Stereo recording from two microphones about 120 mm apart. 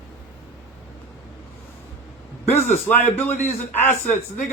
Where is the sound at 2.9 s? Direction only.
15° left (ahead or behind).